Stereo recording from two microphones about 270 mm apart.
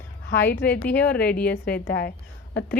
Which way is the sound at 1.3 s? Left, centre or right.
Left.